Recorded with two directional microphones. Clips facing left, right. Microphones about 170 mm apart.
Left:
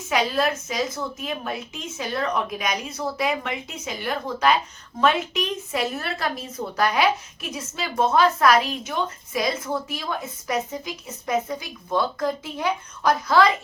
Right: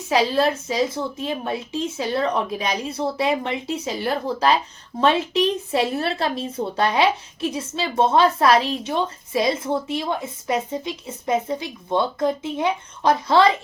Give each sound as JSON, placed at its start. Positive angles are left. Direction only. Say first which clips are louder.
{"t": 0.1, "sound": "a woman's voice", "louder": "right 4 dB", "side_deg": -30}